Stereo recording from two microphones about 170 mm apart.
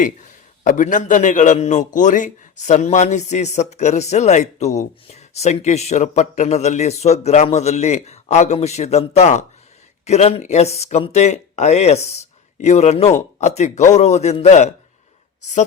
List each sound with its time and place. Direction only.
0.6 s a man's voice: 50° left (ahead or behind)